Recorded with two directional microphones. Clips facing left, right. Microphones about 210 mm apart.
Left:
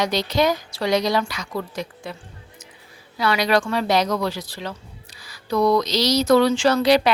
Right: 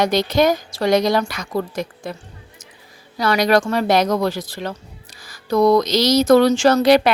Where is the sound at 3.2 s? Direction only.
45° right (ahead or behind).